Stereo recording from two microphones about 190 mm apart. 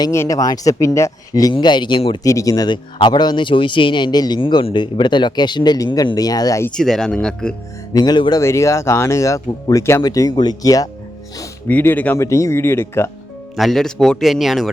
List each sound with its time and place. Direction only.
0.0 s speech: 15° left (ahead or behind)
2.2 s speech: 15° left (ahead or behind)
6.7 s a man's voice: 5° left (ahead or behind)
7.9 s speech: 20° left (ahead or behind)
13.6 s a man's voice: centre (ahead or behind)